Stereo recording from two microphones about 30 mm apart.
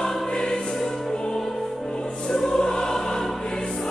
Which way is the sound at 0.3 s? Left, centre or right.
Left.